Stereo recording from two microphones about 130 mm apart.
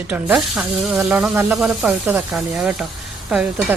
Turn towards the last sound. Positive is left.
turn(degrees=-5)  # may be behind; listen again after turning